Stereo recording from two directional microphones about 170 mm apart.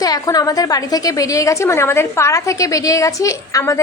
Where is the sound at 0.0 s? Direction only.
20° left (ahead or behind).